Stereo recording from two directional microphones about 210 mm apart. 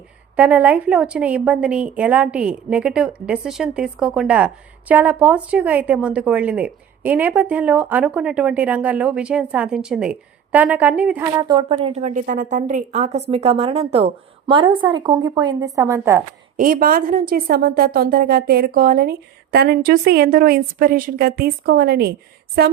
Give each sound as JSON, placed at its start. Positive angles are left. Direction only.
{"t": 0.3, "sound": "a woman's voice", "side_deg": -5}
{"t": 16.6, "sound": "a woman's voice", "side_deg": -40}